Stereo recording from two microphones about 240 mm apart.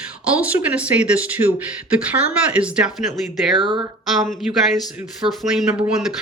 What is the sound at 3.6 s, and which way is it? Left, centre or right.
Speech, centre.